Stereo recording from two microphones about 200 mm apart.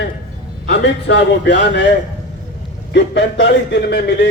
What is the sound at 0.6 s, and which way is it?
A man's voice, 65° left (ahead or behind).